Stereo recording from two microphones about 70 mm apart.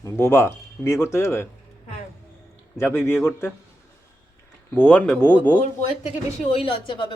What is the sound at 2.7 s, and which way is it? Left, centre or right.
Speech, left.